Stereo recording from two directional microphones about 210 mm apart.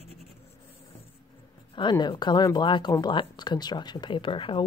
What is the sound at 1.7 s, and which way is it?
Speech, 20° left (ahead or behind).